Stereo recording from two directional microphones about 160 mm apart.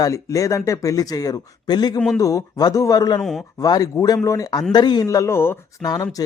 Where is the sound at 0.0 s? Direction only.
20° left (ahead or behind).